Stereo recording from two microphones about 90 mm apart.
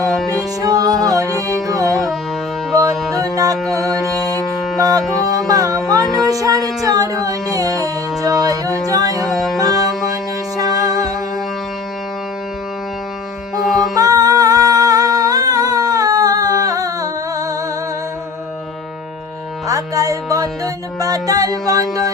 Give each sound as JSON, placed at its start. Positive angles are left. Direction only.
{"t": 0.6, "sound": "music", "side_deg": -45}
{"t": 3.2, "sound": "music", "side_deg": -40}
{"t": 4.8, "sound": "music", "side_deg": -40}
{"t": 5.8, "sound": "music", "side_deg": 5}
{"t": 6.2, "sound": "music", "side_deg": -40}
{"t": 9.2, "sound": "music", "side_deg": 0}
{"t": 10.6, "sound": "music", "side_deg": -45}
{"t": 13.6, "sound": "music", "side_deg": 0}
{"t": 13.9, "sound": "music", "side_deg": -45}
{"t": 19.6, "sound": "music", "side_deg": -40}